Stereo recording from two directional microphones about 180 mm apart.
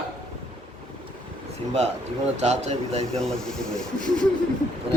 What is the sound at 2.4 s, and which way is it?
Speech, 40° right (ahead or behind).